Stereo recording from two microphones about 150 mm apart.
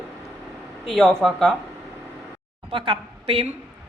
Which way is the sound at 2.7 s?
35° right (ahead or behind).